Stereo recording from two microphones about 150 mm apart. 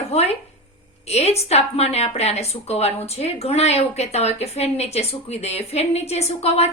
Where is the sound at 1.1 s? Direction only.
45° left (ahead or behind).